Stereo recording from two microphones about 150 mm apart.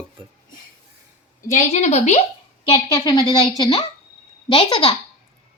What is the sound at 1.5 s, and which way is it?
Speech, 50° left (ahead or behind).